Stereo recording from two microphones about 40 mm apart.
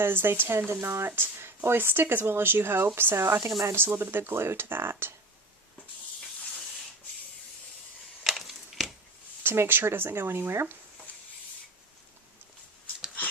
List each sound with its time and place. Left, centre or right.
0.0 s speech: right
0.7 s speech: right
3.8 s speech: right
8.2 s a sound: centre
9.4 s speech: right